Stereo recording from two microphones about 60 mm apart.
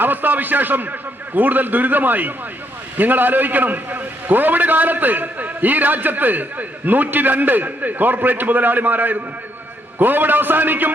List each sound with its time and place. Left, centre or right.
0.0 s a man's voice: right